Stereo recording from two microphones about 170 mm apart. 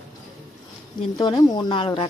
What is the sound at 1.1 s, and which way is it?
Speech, 20° left (ahead or behind).